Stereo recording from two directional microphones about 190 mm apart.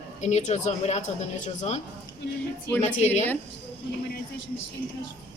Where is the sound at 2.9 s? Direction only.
35° left (ahead or behind).